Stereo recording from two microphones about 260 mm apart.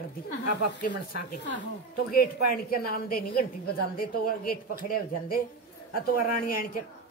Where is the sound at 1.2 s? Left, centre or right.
Left.